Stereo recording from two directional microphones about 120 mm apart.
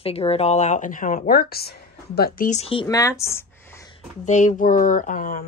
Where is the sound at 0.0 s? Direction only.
55° left (ahead or behind); by 1.3 s 90° left.